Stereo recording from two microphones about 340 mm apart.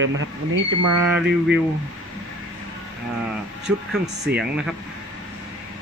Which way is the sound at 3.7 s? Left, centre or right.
Centre.